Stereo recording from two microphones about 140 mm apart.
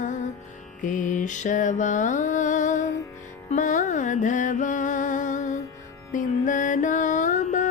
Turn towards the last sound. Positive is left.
turn(degrees=60)  # may be behind; listen again after turning